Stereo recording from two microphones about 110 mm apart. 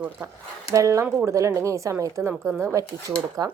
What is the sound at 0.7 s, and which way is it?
Speech, 30° right (ahead or behind).